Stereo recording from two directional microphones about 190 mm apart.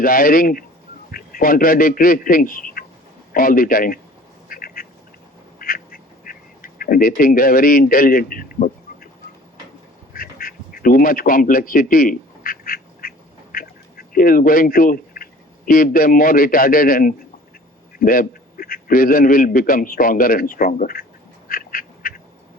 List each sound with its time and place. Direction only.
0.0 s a man's voice: 50° left (ahead or behind)
4.4 s duck: 50° left (ahead or behind)
5.5 s quack: 50° left (ahead or behind)
10.1 s quack: 50° left (ahead or behind)
18.0 s speech: 50° left (ahead or behind)
21.4 s duck: 50° left (ahead or behind)